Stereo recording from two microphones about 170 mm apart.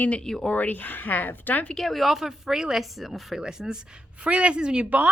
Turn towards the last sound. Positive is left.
turn(degrees=-5)  # may be behind; listen again after turning